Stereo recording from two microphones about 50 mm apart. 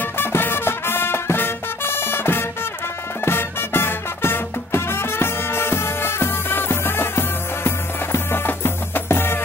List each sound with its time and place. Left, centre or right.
0.0 s music: left